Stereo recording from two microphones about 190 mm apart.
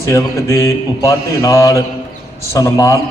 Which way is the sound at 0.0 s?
15° left (ahead or behind).